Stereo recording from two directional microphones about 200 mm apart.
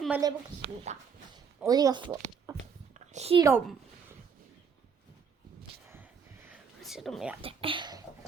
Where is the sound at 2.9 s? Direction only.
35° right (ahead or behind).